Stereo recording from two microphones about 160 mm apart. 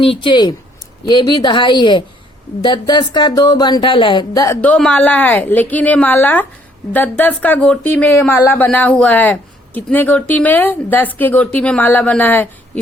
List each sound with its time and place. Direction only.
0.0 s speech: 30° left (ahead or behind)
4.6 s speech: 10° left (ahead or behind)